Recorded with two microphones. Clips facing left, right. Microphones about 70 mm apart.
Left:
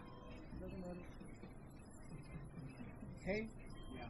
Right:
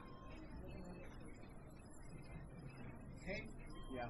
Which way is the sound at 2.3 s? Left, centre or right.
Right.